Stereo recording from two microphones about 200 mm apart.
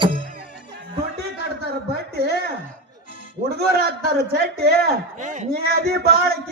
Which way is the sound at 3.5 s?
55° right (ahead or behind).